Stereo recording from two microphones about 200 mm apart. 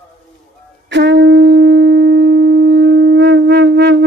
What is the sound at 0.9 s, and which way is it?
Wind instrument, 60° right (ahead or behind).